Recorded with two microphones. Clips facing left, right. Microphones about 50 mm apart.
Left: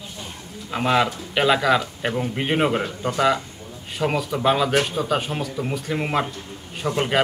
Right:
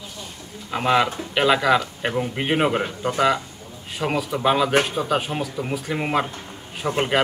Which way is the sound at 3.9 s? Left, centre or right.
Centre.